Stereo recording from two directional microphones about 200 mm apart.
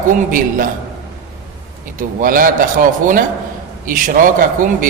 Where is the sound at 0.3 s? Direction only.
45° right (ahead or behind).